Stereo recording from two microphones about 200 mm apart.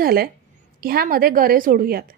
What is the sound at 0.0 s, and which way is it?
A woman's voice, 50° right (ahead or behind).